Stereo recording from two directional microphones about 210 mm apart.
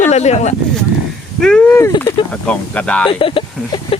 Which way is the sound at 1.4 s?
5° left (ahead or behind).